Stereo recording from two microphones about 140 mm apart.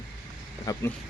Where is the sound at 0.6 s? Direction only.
25° left (ahead or behind).